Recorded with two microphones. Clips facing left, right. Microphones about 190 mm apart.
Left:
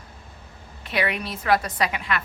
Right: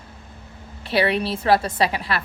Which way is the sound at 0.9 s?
30° right (ahead or behind).